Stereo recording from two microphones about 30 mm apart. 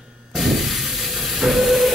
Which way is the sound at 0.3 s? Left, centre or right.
Centre.